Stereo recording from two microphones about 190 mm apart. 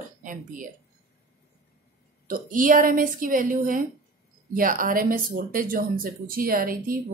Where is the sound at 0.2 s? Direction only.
45° right (ahead or behind).